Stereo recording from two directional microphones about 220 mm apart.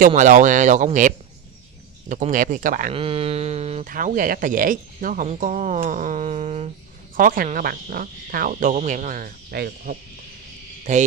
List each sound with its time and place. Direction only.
0.0 s speech: 35° right (ahead or behind)
3.0 s speech: 25° right (ahead or behind)